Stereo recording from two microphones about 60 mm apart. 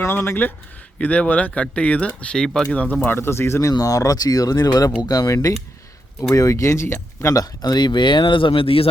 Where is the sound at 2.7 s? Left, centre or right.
Left.